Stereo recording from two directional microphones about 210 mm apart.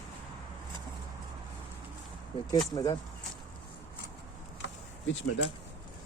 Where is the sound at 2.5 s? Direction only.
20° left (ahead or behind).